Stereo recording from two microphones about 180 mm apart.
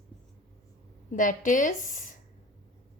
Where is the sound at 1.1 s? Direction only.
45° left (ahead or behind).